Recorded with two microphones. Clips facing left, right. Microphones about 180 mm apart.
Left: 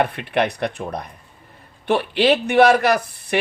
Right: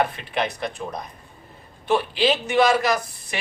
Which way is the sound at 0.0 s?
60° left (ahead or behind).